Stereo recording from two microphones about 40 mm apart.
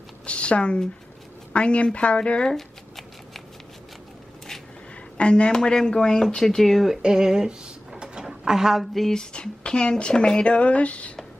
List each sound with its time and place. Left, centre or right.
0.3 s speech: left
5.1 s speech: left; by 6.9 s centre
7.0 s drawer open or close: centre
9.1 s speech: left